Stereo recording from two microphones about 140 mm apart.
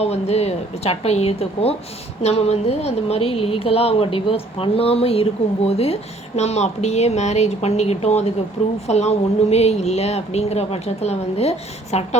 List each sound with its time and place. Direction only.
0.0 s speech: 50° left (ahead or behind)